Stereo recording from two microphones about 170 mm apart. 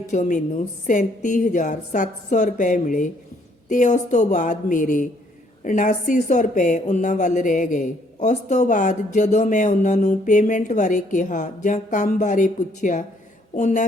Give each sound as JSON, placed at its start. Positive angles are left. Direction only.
{"t": 0.1, "sound": "a woman's voice", "side_deg": 50}